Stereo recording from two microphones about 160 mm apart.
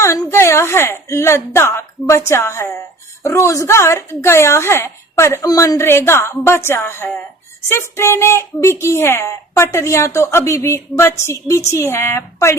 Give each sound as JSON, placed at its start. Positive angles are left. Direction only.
{"t": 0.0, "sound": "a woman's voice", "side_deg": 15}